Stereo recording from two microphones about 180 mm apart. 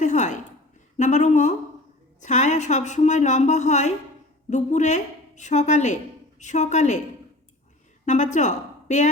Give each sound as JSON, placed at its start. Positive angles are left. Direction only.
{"t": 0.0, "sound": "a sound", "side_deg": 40}
{"t": 0.9, "sound": "a woman's voice", "side_deg": 40}
{"t": 8.0, "sound": "a woman's voice", "side_deg": 40}